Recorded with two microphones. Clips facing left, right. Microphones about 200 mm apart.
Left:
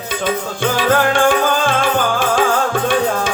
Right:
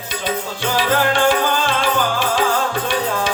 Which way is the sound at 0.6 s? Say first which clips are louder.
Left 3 dB; 50° left (ahead or behind).